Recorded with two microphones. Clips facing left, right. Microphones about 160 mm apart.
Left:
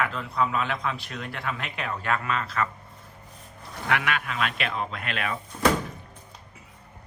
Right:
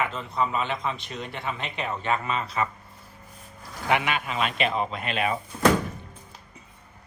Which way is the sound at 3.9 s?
Centre (ahead or behind).